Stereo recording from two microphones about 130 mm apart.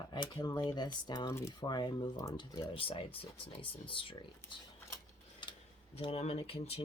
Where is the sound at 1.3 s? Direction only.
20° left (ahead or behind).